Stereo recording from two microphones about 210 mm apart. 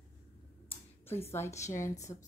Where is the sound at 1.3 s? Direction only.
15° left (ahead or behind).